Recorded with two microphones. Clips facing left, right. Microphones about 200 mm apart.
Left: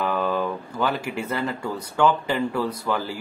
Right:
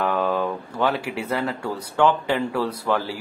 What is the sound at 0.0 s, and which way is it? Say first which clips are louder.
Speech: right 1 dB; centre (ahead or behind).